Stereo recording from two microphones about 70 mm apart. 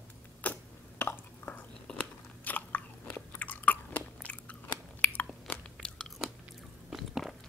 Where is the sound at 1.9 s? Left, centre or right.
Centre.